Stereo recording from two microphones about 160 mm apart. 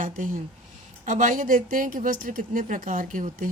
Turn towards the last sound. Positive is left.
turn(degrees=-55)  # may be behind; listen again after turning